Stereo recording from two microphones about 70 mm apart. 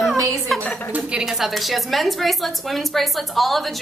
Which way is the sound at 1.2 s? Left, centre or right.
Centre.